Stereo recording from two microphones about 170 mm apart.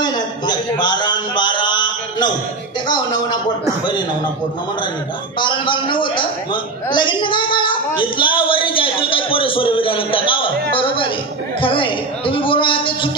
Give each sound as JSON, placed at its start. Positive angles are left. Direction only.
{"t": 0.0, "sound": "a sound", "side_deg": 25}
{"t": 2.9, "sound": "speech", "side_deg": 25}
{"t": 5.4, "sound": "a man's voice", "side_deg": 30}